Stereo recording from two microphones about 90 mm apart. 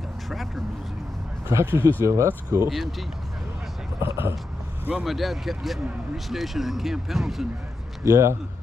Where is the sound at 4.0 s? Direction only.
25° right (ahead or behind).